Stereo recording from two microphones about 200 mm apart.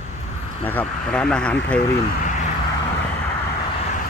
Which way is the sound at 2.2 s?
40° left (ahead or behind).